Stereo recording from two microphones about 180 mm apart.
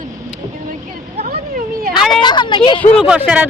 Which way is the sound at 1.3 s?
50° right (ahead or behind).